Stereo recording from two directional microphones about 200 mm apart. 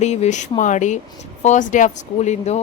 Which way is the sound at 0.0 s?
35° left (ahead or behind).